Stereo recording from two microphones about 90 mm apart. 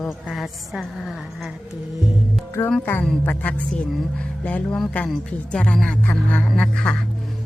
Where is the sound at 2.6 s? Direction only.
20° left (ahead or behind).